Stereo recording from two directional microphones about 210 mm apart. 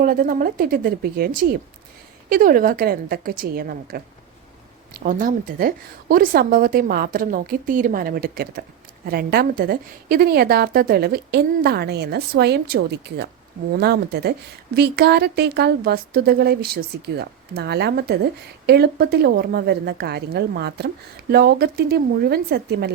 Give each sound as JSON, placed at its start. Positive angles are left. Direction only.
{"t": 0.0, "sound": "a woman's voice", "side_deg": -45}
{"t": 2.3, "sound": "a woman's voice", "side_deg": -40}